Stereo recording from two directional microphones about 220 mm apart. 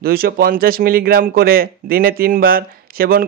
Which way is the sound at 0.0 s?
45° right (ahead or behind).